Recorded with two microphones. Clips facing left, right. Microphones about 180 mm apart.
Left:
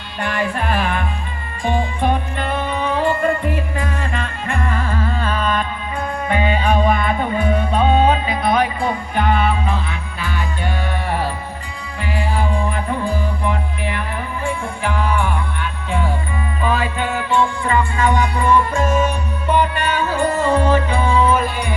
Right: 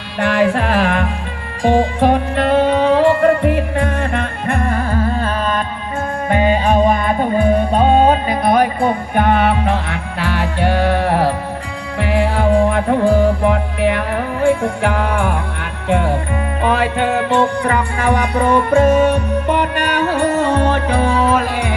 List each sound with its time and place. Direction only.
0.2 s music: 85° right
15.9 s music: 70° right (ahead or behind); by 21.8 s 90° right